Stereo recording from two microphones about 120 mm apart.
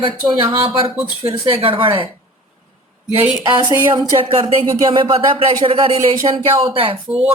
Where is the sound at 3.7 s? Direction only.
30° right (ahead or behind).